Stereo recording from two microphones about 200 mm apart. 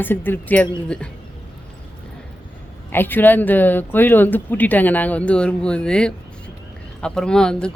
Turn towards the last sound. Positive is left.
turn(degrees=5)  # may be behind; listen again after turning